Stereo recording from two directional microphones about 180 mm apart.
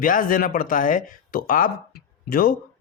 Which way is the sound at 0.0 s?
50° left (ahead or behind).